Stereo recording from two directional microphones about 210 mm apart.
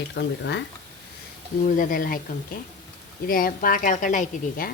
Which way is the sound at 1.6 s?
40° left (ahead or behind).